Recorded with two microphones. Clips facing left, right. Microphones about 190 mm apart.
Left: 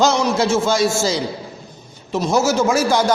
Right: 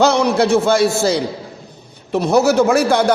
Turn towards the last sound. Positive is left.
turn(degrees=-60)  # may be behind; listen again after turning